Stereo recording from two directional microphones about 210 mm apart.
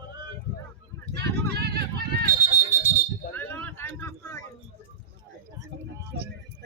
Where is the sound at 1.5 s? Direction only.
50° right (ahead or behind).